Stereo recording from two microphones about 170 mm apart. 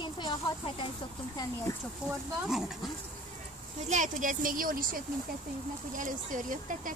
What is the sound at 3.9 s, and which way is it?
Speech, 50° right (ahead or behind).